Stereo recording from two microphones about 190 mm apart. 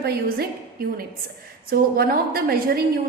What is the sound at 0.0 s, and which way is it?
Speech, 55° right (ahead or behind).